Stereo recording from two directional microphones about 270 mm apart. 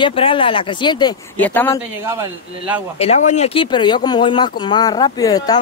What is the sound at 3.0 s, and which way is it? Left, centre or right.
A woman's voice, left.